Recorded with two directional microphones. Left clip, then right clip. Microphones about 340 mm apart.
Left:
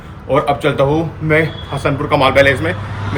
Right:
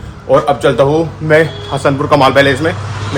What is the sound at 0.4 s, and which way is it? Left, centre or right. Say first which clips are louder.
A man's voice: right 4 dB; centre.